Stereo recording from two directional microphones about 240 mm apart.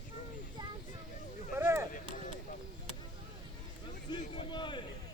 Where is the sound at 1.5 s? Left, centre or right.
Centre.